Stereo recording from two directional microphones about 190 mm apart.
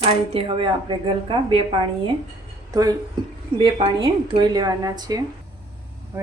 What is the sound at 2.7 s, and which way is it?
A woman's voice, 20° right (ahead or behind).